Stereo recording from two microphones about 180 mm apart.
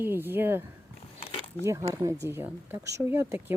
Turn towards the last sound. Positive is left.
turn(degrees=-15)  # may be behind; listen again after turning